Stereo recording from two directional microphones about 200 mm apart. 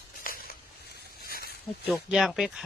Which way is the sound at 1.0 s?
50° left (ahead or behind).